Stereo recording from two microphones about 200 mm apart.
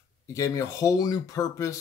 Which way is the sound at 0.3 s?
15° left (ahead or behind).